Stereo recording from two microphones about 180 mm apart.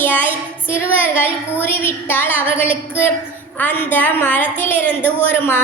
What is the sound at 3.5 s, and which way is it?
A woman's voice, 10° left (ahead or behind).